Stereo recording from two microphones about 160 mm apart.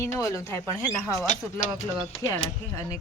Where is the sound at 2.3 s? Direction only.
15° left (ahead or behind).